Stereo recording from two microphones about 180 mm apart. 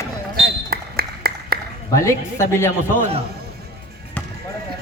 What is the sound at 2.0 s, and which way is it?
Speech, 15° left (ahead or behind).